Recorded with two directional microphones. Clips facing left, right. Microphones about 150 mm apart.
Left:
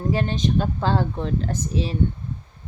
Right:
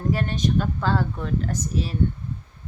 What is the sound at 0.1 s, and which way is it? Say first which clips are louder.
A woman's voice: left 1 dB; 25° left (ahead or behind).